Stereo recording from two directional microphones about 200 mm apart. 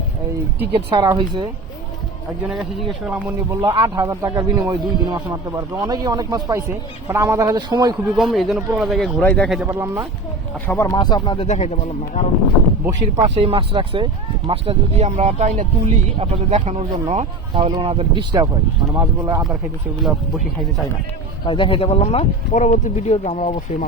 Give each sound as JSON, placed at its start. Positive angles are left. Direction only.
{"t": 0.7, "sound": "speech", "side_deg": -20}
{"t": 2.5, "sound": "speech", "side_deg": 0}
{"t": 8.1, "sound": "speech", "side_deg": 0}
{"t": 9.6, "sound": "speech", "side_deg": -15}
{"t": 10.7, "sound": "speech", "side_deg": 15}
{"t": 13.2, "sound": "speech", "side_deg": -30}
{"t": 21.4, "sound": "speech", "side_deg": 25}